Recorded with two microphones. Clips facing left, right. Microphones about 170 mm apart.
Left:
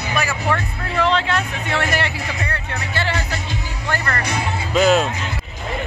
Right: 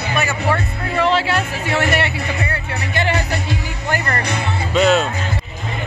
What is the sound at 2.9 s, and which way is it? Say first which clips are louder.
Music: right 4 dB; 15° right (ahead or behind).